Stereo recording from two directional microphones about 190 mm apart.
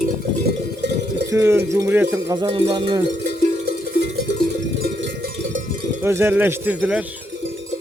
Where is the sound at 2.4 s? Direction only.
30° right (ahead or behind).